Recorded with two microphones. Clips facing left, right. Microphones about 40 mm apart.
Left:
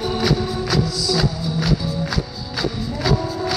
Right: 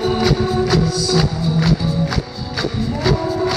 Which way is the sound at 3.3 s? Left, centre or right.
Centre.